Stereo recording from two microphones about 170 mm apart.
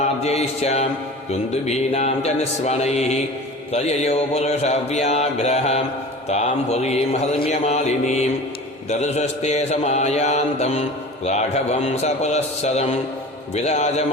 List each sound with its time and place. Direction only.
0.0 s mantra: 40° left (ahead or behind)